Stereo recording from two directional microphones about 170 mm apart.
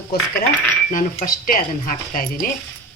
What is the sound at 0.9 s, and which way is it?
A woman's voice, 55° left (ahead or behind).